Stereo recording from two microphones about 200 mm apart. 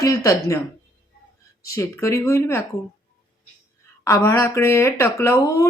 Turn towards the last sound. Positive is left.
turn(degrees=15)  # may be behind; listen again after turning